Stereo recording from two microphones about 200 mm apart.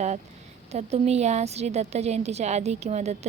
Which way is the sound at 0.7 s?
30° right (ahead or behind).